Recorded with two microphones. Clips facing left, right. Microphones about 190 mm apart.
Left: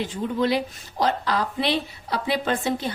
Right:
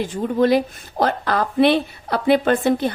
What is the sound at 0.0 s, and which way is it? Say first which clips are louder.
A woman's voice: right 5 dB; 50° right (ahead or behind).